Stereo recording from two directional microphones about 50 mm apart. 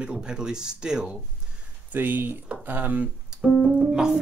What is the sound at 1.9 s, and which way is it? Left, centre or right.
Speech, right.